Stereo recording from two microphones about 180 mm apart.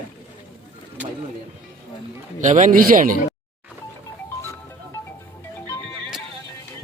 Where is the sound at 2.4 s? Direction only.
45° right (ahead or behind).